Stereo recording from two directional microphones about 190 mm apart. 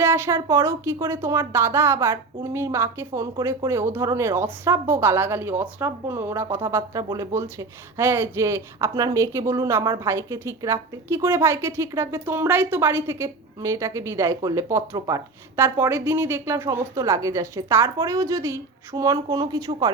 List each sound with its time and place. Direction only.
0.0 s speech: 15° right (ahead or behind)